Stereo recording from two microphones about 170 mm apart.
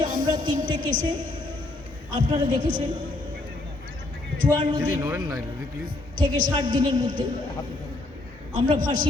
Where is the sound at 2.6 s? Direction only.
55° right (ahead or behind).